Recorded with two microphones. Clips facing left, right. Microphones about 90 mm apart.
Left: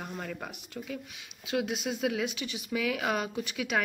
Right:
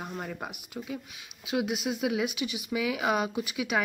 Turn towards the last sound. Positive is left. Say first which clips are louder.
# right 2 dB
turn(degrees=-10)  # may be behind; listen again after turning